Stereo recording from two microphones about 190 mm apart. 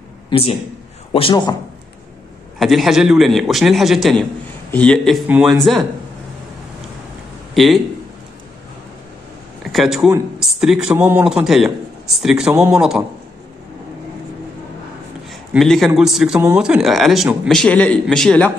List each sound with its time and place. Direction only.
0.3 s a man's voice: 30° left (ahead or behind)
2.6 s speech: centre (ahead or behind)
7.5 s speech: centre (ahead or behind)
9.6 s speech: centre (ahead or behind)
15.5 s speech: centre (ahead or behind)